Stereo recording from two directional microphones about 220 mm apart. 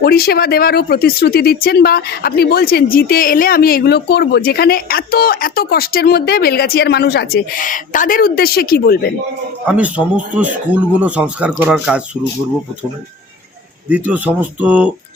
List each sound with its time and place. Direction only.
0.0 s speech: 45° left (ahead or behind)
9.6 s speech: 5° right (ahead or behind)
10.9 s speech: 5° right (ahead or behind)
13.9 s speech: 5° right (ahead or behind)